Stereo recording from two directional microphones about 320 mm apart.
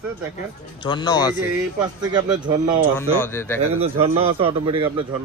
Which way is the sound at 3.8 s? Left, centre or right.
Centre.